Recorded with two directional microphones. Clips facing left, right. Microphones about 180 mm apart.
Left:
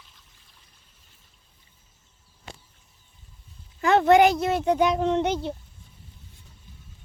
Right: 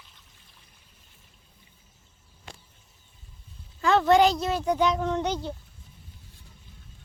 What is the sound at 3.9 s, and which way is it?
Speech, 55° left (ahead or behind).